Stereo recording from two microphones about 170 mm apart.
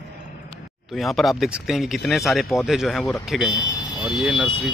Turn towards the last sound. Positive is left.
turn(degrees=0)  # may be behind; listen again after turning